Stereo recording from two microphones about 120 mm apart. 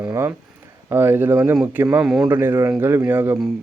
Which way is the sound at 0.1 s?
20° right (ahead or behind).